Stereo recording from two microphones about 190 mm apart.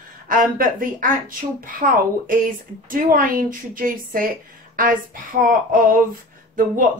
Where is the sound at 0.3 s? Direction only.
45° right (ahead or behind).